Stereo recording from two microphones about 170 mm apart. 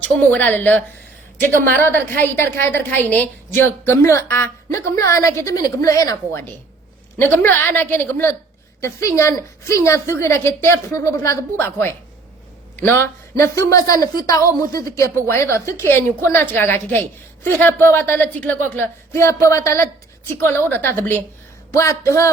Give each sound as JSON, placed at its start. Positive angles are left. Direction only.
{"t": 0.0, "sound": "a woman's voice", "side_deg": 10}